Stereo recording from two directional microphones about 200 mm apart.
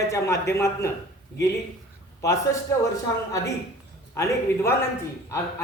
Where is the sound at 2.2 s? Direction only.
15° left (ahead or behind).